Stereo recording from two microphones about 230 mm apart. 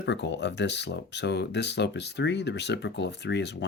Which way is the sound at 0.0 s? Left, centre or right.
Left.